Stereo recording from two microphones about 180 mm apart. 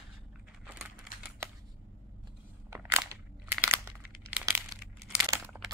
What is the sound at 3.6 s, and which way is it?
Crumpling, 10° right (ahead or behind).